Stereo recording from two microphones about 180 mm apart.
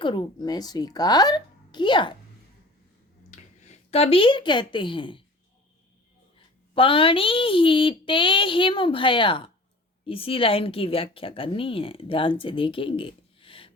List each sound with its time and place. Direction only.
0.0 s speech: 25° left (ahead or behind)
3.2 s speech: 40° left (ahead or behind)
6.7 s speech: 30° left (ahead or behind)